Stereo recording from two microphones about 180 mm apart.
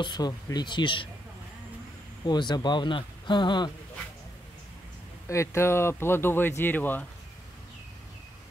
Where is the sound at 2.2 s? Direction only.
25° left (ahead or behind).